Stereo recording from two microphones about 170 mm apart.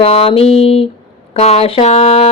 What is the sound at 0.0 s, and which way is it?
Speech, 35° left (ahead or behind).